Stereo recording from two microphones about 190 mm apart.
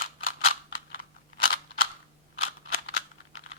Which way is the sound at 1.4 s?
45° left (ahead or behind).